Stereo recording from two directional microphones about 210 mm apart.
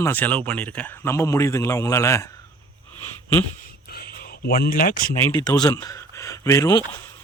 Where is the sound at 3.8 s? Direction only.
45° left (ahead or behind).